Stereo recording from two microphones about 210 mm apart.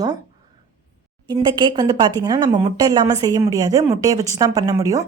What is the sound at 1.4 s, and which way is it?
A woman's voice, 20° right (ahead or behind).